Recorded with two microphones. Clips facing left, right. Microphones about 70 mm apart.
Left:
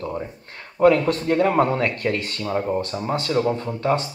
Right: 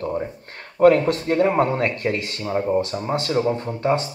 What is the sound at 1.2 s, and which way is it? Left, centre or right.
Speech, right.